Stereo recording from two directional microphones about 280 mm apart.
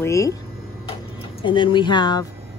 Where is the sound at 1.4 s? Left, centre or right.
Centre.